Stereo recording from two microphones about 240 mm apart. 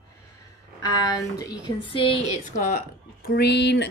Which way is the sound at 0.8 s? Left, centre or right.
Centre.